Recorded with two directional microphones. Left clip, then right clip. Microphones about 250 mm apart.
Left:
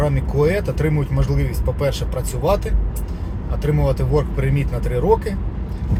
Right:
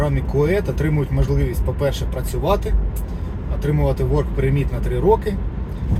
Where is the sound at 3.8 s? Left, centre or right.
Centre.